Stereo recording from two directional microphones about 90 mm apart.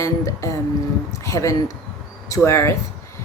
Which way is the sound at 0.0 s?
35° left (ahead or behind).